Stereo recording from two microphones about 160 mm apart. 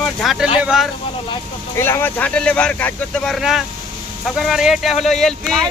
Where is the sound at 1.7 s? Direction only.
15° left (ahead or behind).